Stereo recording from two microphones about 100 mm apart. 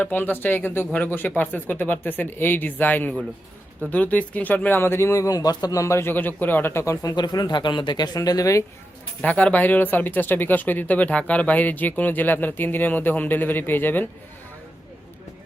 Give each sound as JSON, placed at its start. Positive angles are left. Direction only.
{"t": 0.0, "sound": "speech", "side_deg": 20}
{"t": 9.2, "sound": "speech", "side_deg": 15}